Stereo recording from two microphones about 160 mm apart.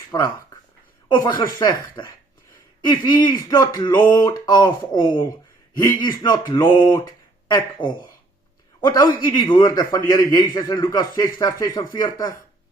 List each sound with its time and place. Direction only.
0.1 s a man's voice: 25° left (ahead or behind)